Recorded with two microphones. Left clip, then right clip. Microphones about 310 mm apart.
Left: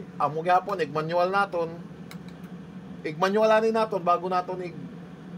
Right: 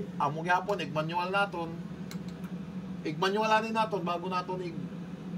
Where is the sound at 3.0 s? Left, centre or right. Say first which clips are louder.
Left 7 dB; centre.